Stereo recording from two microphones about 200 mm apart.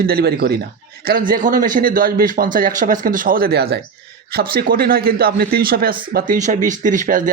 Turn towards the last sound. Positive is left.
turn(degrees=-40)  # may be behind; listen again after turning